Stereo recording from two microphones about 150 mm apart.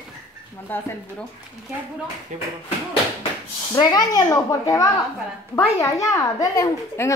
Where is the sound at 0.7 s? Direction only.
15° left (ahead or behind).